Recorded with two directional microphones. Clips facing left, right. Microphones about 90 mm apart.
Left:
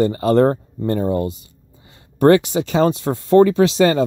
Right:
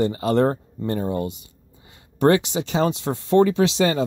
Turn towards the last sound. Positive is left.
turn(degrees=45)  # may be behind; listen again after turning